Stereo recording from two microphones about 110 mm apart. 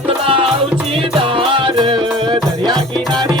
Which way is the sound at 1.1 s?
55° right (ahead or behind).